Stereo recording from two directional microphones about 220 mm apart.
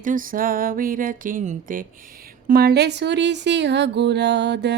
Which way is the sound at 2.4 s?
45° right (ahead or behind).